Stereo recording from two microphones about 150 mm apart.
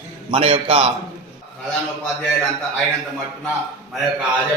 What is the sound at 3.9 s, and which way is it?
Speech, centre (ahead or behind).